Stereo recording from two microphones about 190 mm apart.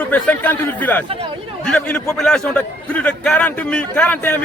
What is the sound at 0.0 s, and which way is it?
A man's voice, 10° left (ahead or behind).